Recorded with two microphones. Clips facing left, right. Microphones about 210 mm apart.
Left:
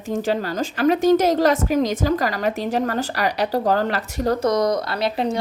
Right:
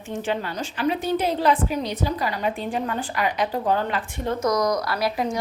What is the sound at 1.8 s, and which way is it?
Speech, 90° left.